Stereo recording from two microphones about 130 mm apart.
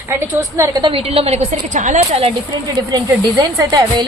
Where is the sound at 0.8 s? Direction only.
40° right (ahead or behind).